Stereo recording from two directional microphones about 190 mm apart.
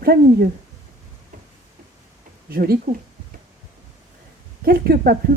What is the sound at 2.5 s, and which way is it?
Speech, 50° right (ahead or behind).